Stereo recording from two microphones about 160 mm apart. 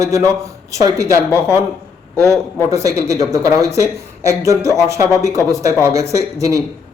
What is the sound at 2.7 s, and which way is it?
Speech, 20° right (ahead or behind).